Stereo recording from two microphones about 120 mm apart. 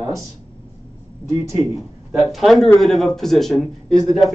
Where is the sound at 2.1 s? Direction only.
Centre (ahead or behind).